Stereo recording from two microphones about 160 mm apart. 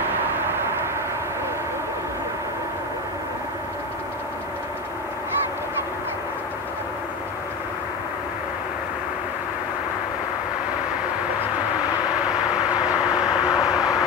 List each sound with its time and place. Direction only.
0.0 s vehicle: 15° right (ahead or behind)
12.3 s vehicle: 5° right (ahead or behind)
13.6 s vehicle: 20° left (ahead or behind)